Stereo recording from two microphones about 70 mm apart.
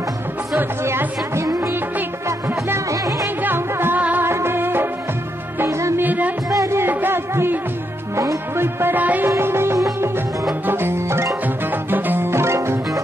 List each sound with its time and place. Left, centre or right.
0.8 s music: right
3.4 s music: right
4.3 s music: right
6.0 s music: right
6.5 s music: right
8.2 s music: right
8.9 s music: right
9.3 s music: right